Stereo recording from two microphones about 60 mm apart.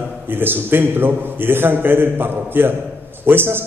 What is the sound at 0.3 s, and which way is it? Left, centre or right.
A man's voice, right.